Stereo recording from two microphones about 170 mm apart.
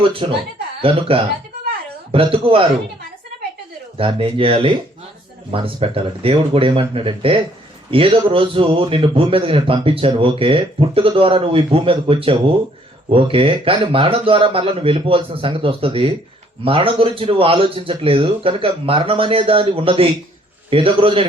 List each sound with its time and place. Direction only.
0.0 s a man's voice: 30° right (ahead or behind)
3.9 s a man's voice: 30° right (ahead or behind)